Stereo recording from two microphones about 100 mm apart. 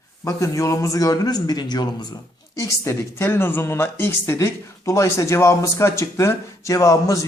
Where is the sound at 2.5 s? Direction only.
30° left (ahead or behind).